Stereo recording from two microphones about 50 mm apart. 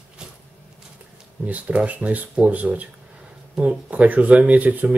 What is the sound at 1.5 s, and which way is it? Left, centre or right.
Speech, right.